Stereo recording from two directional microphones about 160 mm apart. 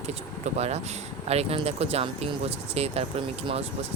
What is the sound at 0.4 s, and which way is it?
Speech, 45° right (ahead or behind).